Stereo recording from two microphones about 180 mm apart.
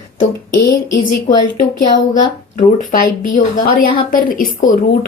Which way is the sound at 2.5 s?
50° left (ahead or behind).